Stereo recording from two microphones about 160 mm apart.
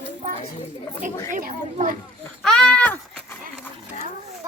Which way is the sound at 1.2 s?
50° right (ahead or behind).